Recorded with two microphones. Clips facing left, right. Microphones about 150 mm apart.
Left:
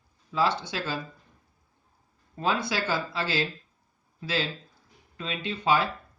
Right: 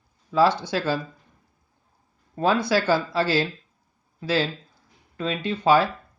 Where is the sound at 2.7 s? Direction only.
40° right (ahead or behind).